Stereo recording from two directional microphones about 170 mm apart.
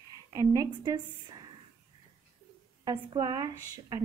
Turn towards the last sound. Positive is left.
turn(degrees=-25)  # may be behind; listen again after turning